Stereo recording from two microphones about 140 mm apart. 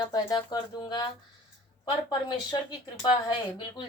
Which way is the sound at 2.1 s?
35° left (ahead or behind).